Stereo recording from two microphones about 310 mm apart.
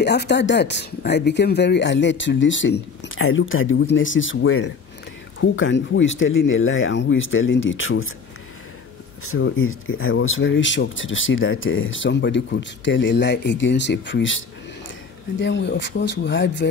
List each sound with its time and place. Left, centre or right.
0.0 s speech: left
9.2 s speech: left